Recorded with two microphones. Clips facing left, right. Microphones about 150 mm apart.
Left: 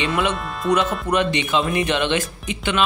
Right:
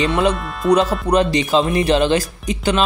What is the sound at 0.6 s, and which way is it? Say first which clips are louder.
Speech: right 5 dB; centre (ahead or behind).